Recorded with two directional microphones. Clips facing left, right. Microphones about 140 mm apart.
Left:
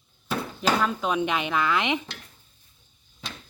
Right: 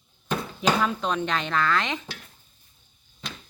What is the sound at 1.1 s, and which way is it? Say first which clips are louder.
Speech: left 1 dB; 10° left (ahead or behind).